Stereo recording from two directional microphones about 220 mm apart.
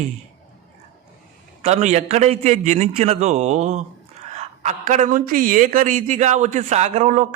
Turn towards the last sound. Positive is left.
turn(degrees=-35)  # may be behind; listen again after turning